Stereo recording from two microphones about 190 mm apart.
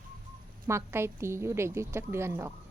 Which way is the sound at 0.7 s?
15° right (ahead or behind).